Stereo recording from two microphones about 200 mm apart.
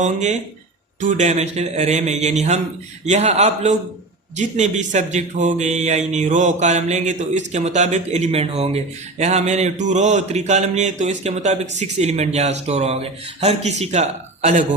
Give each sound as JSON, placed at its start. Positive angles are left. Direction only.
{"t": 0.0, "sound": "speech", "side_deg": -35}